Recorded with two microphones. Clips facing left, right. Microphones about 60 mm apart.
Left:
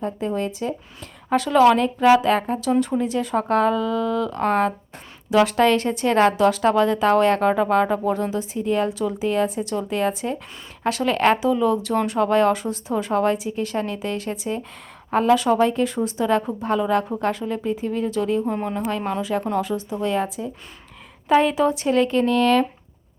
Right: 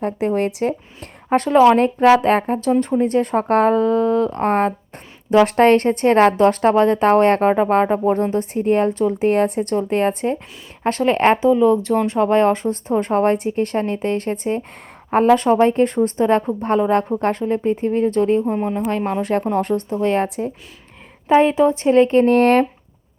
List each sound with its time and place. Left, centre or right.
0.0 s speech: right
1.3 s a woman's voice: right
5.5 s a woman's voice: right
11.4 s a woman's voice: right
17.4 s speech: right
17.7 s a woman's voice: right
18.4 s a woman's voice: centre
18.9 s a woman's voice: right
19.6 s a woman's voice: right
21.2 s a woman's voice: right